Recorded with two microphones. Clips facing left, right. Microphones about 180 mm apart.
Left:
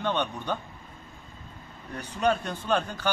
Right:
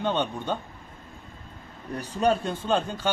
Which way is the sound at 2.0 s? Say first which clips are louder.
Right 2 dB; 30° right (ahead or behind).